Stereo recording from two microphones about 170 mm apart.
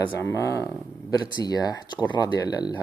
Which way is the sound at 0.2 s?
15° left (ahead or behind).